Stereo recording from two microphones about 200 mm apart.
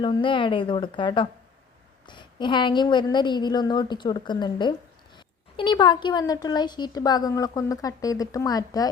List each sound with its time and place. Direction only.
0.0 s speech: 25° left (ahead or behind)